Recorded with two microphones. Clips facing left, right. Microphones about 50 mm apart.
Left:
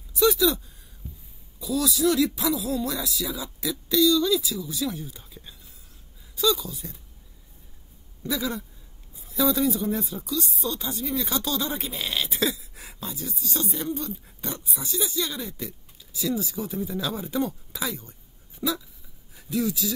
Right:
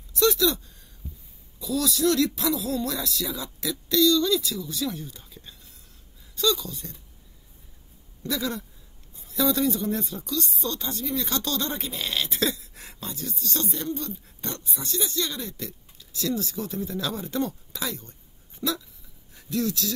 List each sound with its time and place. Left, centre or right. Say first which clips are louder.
0.2 s a sound: left 1 dB; centre
1.6 s speech: left 1 dB; centre
8.2 s a sound: left 1 dB; centre
9.1 s speech: left 1 dB; centre
18.6 s dog: left 1 dB; centre
19.3 s speech: left 1 dB; centre